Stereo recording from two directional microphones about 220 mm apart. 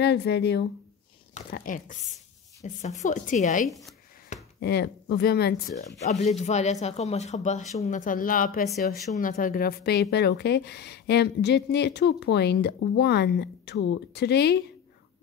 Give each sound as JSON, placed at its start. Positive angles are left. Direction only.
{"t": 0.0, "sound": "speech", "side_deg": 50}
{"t": 1.3, "sound": "speech", "side_deg": 40}
{"t": 3.6, "sound": "speech", "side_deg": 0}
{"t": 4.6, "sound": "speech", "side_deg": 50}
{"t": 6.0, "sound": "speech", "side_deg": 30}